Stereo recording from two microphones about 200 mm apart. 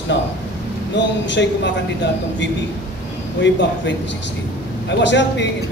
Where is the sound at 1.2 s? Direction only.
60° left (ahead or behind).